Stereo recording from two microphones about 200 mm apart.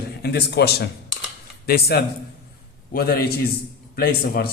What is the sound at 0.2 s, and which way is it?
A man's voice, 55° left (ahead or behind).